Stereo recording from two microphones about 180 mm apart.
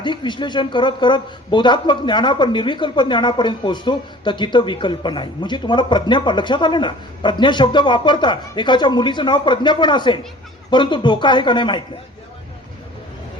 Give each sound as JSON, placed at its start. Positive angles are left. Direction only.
{"t": 0.0, "sound": "a man's voice", "side_deg": 25}